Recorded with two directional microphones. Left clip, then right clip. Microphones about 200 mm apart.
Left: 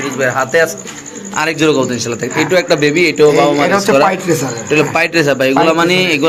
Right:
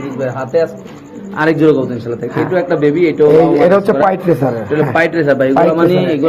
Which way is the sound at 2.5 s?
30° left (ahead or behind).